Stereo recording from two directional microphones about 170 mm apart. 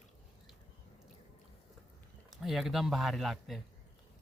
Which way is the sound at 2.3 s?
Centre (ahead or behind).